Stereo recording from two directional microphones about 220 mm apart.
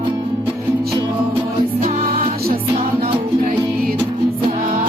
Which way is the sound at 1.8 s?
40° right (ahead or behind).